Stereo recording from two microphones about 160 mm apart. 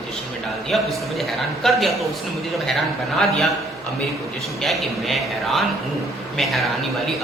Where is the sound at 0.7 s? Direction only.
Centre (ahead or behind).